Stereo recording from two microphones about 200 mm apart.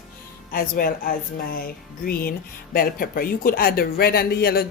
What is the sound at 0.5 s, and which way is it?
Speech, 45° left (ahead or behind).